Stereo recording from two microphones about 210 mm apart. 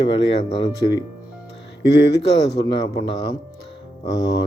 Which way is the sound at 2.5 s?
20° left (ahead or behind).